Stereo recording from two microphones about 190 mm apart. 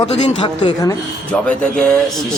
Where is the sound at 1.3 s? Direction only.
5° left (ahead or behind).